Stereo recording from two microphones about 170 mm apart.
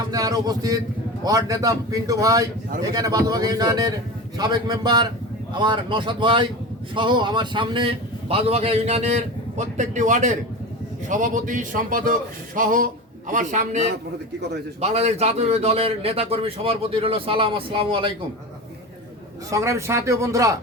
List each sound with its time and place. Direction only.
0.1 s a man's voice: 20° right (ahead or behind)
19.5 s a man's voice: 15° right (ahead or behind)